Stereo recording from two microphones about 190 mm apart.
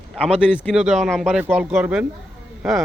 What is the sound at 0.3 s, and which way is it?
Speech, 5° right (ahead or behind).